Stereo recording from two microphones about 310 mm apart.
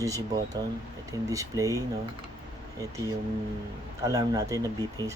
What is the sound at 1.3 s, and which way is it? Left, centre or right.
Speech, centre.